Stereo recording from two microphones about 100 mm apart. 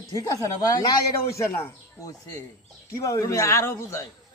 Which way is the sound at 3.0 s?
35° left (ahead or behind).